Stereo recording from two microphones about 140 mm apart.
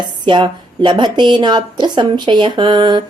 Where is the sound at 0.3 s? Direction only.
35° right (ahead or behind).